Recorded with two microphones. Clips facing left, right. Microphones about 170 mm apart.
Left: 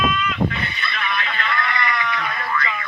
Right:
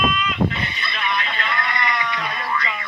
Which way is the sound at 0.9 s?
25° right (ahead or behind).